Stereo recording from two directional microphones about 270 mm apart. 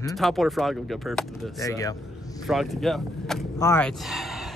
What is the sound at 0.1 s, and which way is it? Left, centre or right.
Speech, centre.